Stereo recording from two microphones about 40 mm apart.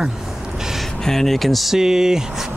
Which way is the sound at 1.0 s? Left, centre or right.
Centre.